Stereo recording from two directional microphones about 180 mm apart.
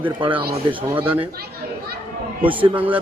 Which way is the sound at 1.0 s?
30° right (ahead or behind).